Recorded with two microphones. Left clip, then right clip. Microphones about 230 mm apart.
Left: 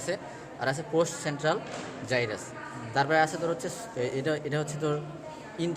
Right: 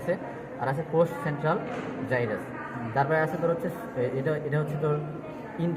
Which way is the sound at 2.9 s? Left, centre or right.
Left.